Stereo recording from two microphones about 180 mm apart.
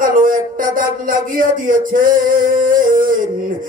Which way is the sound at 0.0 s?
50° right (ahead or behind).